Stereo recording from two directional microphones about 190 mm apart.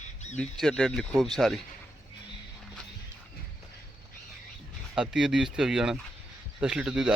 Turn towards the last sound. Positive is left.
turn(degrees=-5)  # may be behind; listen again after turning